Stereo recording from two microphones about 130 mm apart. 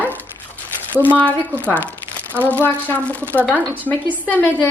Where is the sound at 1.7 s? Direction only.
15° left (ahead or behind).